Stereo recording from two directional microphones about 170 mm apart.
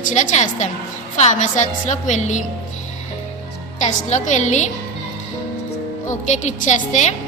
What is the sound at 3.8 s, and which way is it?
Speech, 45° left (ahead or behind).